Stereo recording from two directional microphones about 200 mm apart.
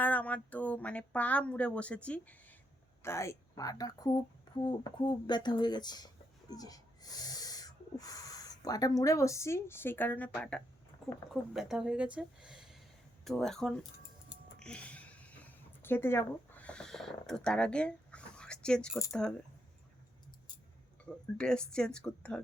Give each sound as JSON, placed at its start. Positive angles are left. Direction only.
{"t": 0.0, "sound": "speech", "side_deg": 5}
{"t": 14.6, "sound": "a sound", "side_deg": 5}
{"t": 15.8, "sound": "speech", "side_deg": 10}
{"t": 21.0, "sound": "speech", "side_deg": 5}